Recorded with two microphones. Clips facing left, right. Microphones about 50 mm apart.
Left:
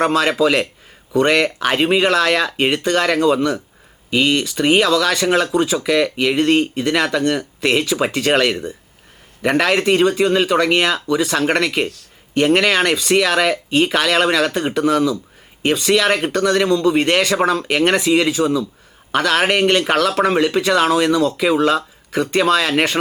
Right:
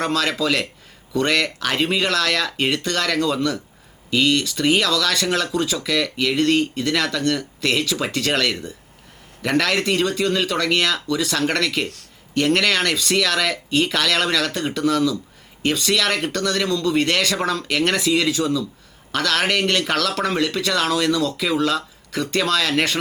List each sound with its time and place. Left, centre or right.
0.0 s speech: left